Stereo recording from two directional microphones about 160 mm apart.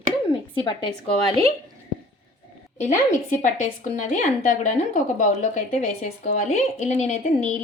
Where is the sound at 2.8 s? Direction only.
50° left (ahead or behind).